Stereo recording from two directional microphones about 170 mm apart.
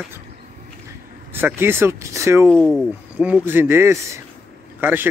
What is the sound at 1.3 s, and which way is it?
Speech, 15° right (ahead or behind).